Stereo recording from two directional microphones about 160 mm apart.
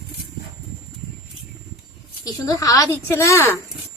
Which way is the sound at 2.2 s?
20° left (ahead or behind).